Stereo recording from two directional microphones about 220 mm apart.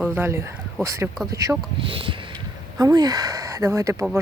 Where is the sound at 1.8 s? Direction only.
25° right (ahead or behind).